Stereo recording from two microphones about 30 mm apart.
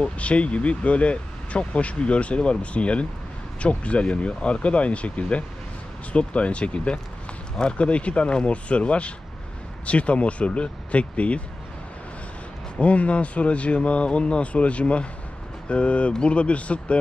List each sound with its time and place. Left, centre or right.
0.2 s speech: left
12.8 s speech: left